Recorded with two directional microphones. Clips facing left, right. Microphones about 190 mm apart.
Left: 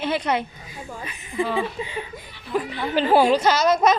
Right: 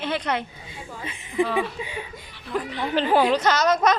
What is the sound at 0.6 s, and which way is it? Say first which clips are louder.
Speech: left 1 dB; 25° right (ahead or behind).